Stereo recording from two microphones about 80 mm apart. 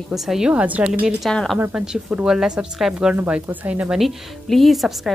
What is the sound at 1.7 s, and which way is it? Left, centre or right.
Speech, centre.